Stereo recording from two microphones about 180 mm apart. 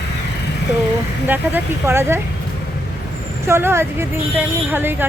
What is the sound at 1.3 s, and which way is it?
Speech, 10° right (ahead or behind).